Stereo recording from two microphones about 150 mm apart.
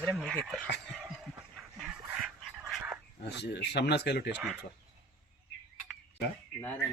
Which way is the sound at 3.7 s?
90° left.